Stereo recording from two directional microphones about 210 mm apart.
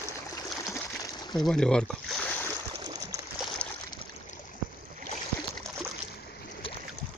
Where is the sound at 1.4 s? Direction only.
5° left (ahead or behind).